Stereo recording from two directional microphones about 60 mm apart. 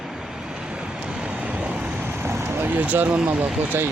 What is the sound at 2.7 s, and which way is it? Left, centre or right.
Speech, right.